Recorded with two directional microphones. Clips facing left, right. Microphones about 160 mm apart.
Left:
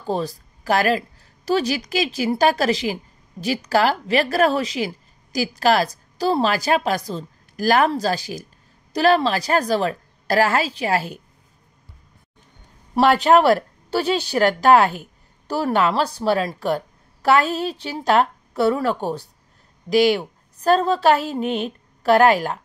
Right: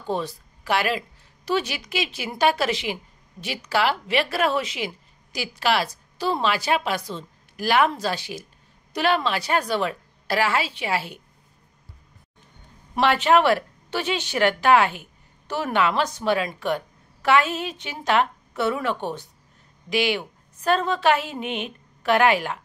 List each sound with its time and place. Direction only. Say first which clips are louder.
0.0 s a woman's voice: left 3 dB; 35° left (ahead or behind)
12.9 s a woman's voice: left 4 dB; 40° left (ahead or behind)